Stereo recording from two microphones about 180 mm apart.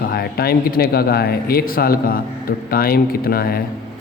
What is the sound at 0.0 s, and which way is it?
A man's voice, 60° left (ahead or behind).